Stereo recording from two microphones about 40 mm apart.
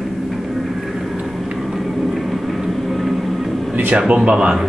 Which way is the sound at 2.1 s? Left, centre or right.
Centre.